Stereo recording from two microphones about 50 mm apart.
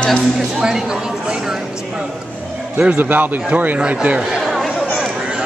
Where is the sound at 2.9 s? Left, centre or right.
Right.